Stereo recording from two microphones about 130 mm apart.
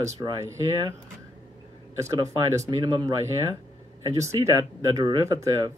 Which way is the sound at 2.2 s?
30° right (ahead or behind).